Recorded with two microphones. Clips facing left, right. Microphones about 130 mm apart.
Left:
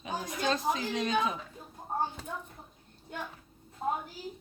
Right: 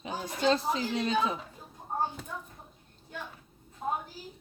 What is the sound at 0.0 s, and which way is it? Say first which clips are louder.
Speech: right 3 dB; 30° right (ahead or behind).